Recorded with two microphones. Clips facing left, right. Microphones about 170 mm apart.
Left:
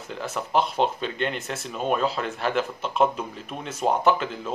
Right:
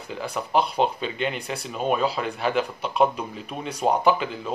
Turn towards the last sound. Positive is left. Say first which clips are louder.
# right 1 dB
turn(degrees=-5)  # may be behind; listen again after turning